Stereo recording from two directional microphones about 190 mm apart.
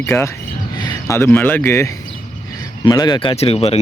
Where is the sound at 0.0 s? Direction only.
15° left (ahead or behind).